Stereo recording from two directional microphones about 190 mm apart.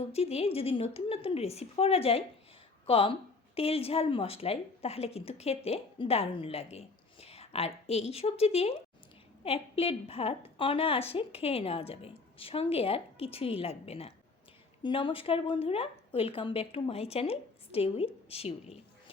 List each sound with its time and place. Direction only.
0.1 s a woman's voice: 35° left (ahead or behind)